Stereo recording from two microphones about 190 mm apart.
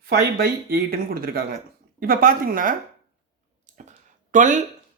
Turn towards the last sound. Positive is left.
turn(degrees=-40)  # may be behind; listen again after turning